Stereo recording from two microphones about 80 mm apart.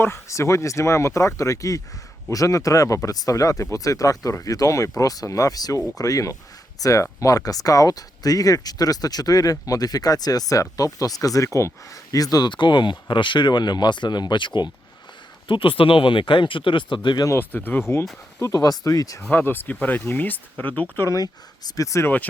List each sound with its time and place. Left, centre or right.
0.0 s speech: left
15.4 s speech: left
17.5 s speech: left
18.3 s speech: left
19.3 s speech: left
21.1 s speech: left
22.0 s speech: left